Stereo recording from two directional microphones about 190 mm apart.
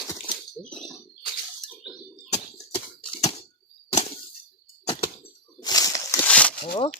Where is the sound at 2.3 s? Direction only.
25° left (ahead or behind).